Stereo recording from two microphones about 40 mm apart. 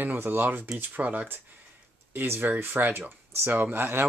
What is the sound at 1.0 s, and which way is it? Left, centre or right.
Speech, right.